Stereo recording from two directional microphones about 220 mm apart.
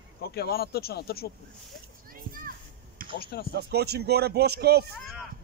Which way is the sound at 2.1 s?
40° right (ahead or behind).